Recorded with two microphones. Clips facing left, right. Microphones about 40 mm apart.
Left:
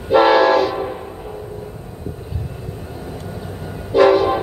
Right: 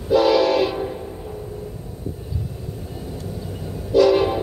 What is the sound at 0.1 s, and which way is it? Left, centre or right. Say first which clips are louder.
Train: left 4 dB; left.